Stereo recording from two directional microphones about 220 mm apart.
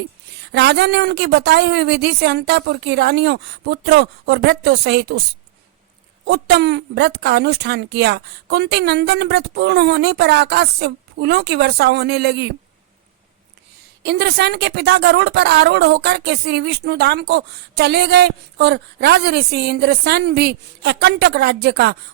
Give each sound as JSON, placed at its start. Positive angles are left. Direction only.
{"t": 0.5, "sound": "a woman's voice", "side_deg": -50}
{"t": 6.2, "sound": "a woman's voice", "side_deg": -50}
{"t": 14.0, "sound": "a woman's voice", "side_deg": -50}